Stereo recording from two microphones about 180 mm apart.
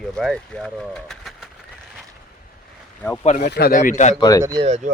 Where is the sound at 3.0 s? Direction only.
10° left (ahead or behind).